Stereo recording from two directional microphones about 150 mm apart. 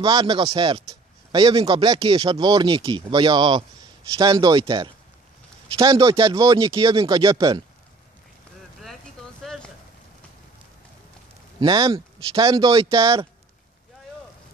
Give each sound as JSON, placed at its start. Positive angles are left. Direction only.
{"t": 0.0, "sound": "speech", "side_deg": -25}
{"t": 9.4, "sound": "a sound", "side_deg": 5}
{"t": 11.6, "sound": "speech", "side_deg": -30}